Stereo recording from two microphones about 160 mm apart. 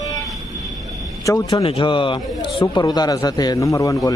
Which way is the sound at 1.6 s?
35° left (ahead or behind).